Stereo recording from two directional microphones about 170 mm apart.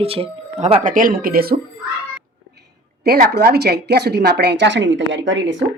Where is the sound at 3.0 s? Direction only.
70° right (ahead or behind); by 5.6 s 90° right.